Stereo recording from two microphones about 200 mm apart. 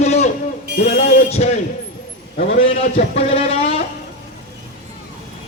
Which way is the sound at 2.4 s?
35° left (ahead or behind).